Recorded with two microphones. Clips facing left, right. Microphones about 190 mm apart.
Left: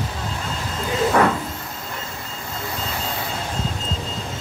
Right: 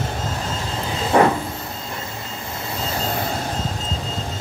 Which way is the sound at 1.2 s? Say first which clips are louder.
Right 3 dB; 20° right (ahead or behind).